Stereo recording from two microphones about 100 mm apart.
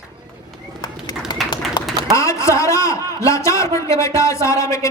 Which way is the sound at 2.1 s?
30° left (ahead or behind).